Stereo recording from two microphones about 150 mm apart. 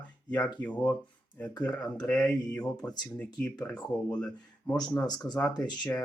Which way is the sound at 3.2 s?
10° left (ahead or behind).